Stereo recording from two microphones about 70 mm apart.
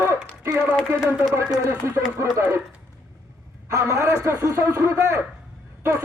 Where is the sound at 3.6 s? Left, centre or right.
Right.